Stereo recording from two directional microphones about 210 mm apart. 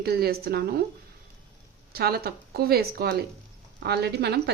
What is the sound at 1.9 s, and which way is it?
A woman's voice, 50° right (ahead or behind).